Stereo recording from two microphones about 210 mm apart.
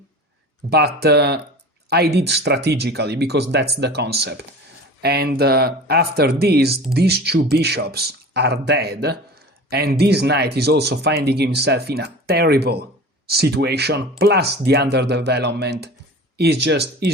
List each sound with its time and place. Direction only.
0.7 s speech: 50° right (ahead or behind)